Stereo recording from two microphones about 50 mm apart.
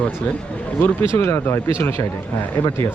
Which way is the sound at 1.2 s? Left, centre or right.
Left.